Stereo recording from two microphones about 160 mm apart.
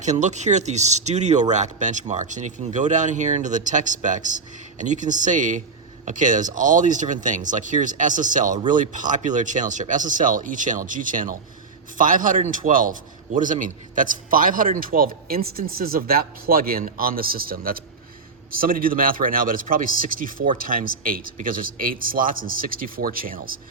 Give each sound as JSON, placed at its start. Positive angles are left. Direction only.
{"t": 0.0, "sound": "a man's voice", "side_deg": -50}